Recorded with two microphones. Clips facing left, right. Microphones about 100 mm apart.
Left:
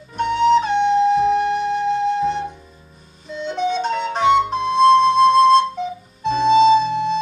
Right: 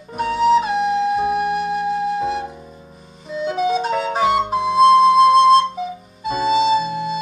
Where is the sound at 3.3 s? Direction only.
5° right (ahead or behind).